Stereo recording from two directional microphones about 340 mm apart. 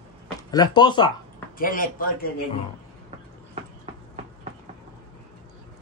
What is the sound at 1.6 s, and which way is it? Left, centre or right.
Speech, left.